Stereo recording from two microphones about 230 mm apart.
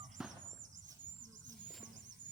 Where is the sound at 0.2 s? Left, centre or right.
Centre.